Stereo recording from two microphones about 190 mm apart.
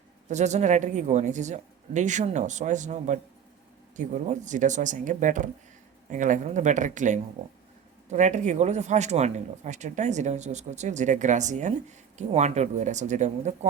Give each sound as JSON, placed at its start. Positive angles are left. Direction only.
{"t": 0.3, "sound": "speech", "side_deg": -35}